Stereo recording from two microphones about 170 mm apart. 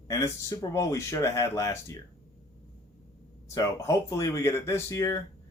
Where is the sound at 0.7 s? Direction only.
20° left (ahead or behind).